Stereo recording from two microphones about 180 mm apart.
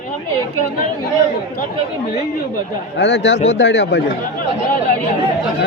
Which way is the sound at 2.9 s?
80° left.